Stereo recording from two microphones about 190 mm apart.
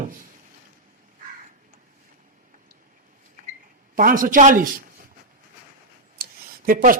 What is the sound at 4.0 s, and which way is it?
Speech, 45° right (ahead or behind).